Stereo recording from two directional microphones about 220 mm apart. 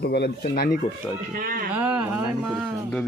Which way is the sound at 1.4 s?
40° right (ahead or behind).